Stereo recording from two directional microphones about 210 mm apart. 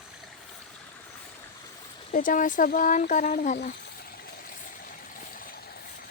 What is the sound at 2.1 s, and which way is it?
Speech, 40° left (ahead or behind).